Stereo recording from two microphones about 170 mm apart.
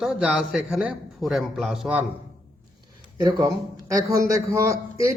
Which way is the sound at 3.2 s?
30° right (ahead or behind).